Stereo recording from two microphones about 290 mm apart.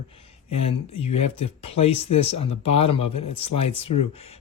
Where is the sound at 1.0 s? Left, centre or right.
Left.